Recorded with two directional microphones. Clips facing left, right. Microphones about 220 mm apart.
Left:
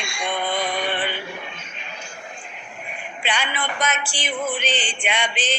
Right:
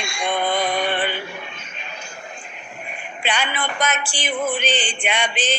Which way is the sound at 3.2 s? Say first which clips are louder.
Right 2 dB; 45° right (ahead or behind).